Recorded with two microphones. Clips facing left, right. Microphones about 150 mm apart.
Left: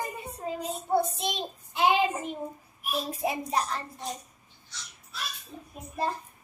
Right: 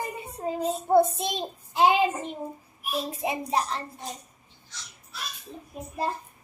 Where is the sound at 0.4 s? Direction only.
25° right (ahead or behind).